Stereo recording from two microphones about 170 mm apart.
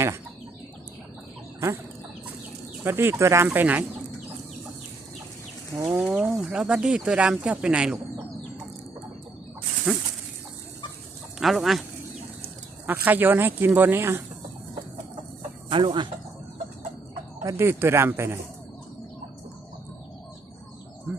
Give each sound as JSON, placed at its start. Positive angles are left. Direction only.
{"t": 2.8, "sound": "speech", "side_deg": -15}
{"t": 5.7, "sound": "speech", "side_deg": -15}
{"t": 6.1, "sound": "speech", "side_deg": -5}
{"t": 9.9, "sound": "speech", "side_deg": 0}
{"t": 11.3, "sound": "speech", "side_deg": 0}
{"t": 13.1, "sound": "speech", "side_deg": -10}
{"t": 15.7, "sound": "speech", "side_deg": -30}
{"t": 17.4, "sound": "speech", "side_deg": -15}